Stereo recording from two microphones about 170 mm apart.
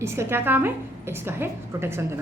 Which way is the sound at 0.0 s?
15° right (ahead or behind).